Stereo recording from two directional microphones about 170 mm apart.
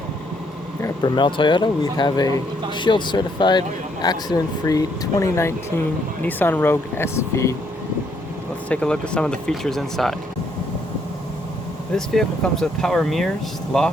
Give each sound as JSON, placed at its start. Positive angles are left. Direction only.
{"t": 0.8, "sound": "speech", "side_deg": 25}
{"t": 8.7, "sound": "speech", "side_deg": 5}
{"t": 11.9, "sound": "speech", "side_deg": 5}